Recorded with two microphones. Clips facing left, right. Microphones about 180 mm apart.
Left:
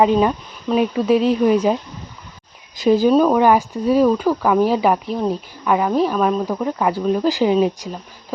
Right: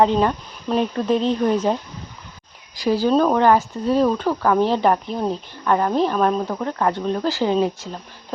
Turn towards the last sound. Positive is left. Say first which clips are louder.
# left 3 dB
turn(degrees=15)  # may be behind; listen again after turning